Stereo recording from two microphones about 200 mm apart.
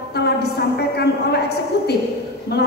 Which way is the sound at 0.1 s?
55° left (ahead or behind).